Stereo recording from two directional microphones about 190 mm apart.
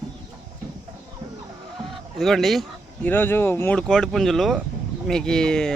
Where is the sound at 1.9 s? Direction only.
Centre (ahead or behind).